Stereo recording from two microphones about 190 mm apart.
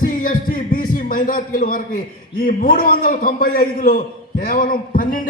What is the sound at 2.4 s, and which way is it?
A man's voice, 45° left (ahead or behind).